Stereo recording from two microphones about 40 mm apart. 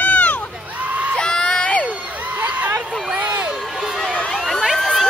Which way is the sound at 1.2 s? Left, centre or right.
Left.